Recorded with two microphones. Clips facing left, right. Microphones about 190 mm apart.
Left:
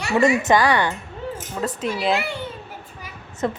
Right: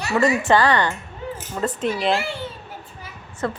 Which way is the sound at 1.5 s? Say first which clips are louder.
Right 2 dB; centre (ahead or behind).